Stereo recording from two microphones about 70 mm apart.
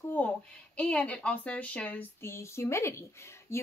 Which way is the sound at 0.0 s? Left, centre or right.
Left.